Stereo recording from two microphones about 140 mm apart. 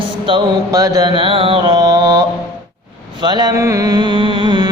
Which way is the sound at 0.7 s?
25° right (ahead or behind).